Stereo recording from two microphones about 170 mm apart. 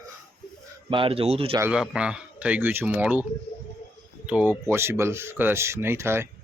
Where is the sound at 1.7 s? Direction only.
5° right (ahead or behind).